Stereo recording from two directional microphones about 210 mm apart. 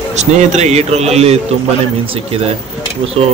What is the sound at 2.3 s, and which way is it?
Speech, 25° right (ahead or behind).